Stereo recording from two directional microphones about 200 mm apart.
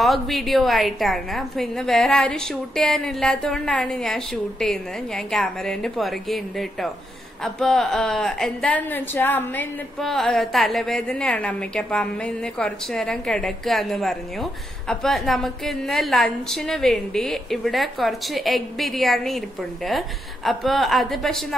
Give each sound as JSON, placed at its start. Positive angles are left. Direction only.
{"t": 0.0, "sound": "a woman's voice", "side_deg": 0}